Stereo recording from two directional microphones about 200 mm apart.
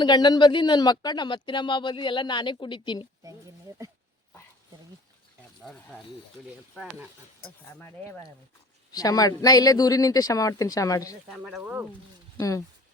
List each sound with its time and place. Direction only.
0.0 s speech: 20° left (ahead or behind)
7.8 s speech: 10° left (ahead or behind)
11.3 s speech: centre (ahead or behind)
12.4 s speech: 15° left (ahead or behind)